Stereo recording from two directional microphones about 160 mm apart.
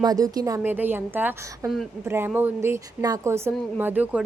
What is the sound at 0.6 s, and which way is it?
A woman's voice, 10° right (ahead or behind).